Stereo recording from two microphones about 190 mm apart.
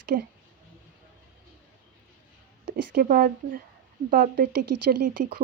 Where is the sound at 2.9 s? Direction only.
50° right (ahead or behind).